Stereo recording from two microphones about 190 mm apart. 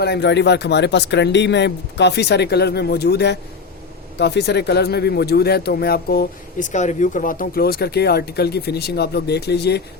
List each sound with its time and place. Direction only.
0.0 s speech: 60° left (ahead or behind)